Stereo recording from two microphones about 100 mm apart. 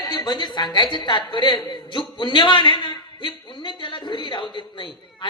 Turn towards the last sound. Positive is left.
turn(degrees=50)  # may be behind; listen again after turning